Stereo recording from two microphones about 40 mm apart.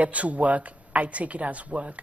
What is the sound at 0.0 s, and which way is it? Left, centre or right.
A woman's voice, right.